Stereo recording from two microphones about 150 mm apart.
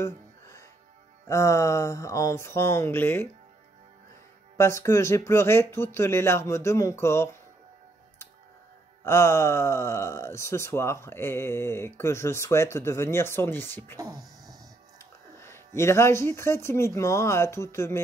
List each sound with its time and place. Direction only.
0.0 s music: 20° left (ahead or behind)
1.2 s speech: 20° left (ahead or behind)
4.6 s speech: 20° left (ahead or behind)
9.0 s speech: 20° left (ahead or behind)
15.0 s speech: 15° left (ahead or behind)